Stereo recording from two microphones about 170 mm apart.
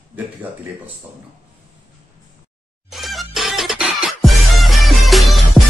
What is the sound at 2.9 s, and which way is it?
Music, centre (ahead or behind).